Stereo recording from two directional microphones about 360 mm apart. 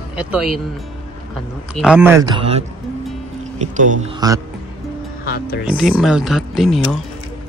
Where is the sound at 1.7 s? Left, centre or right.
Centre.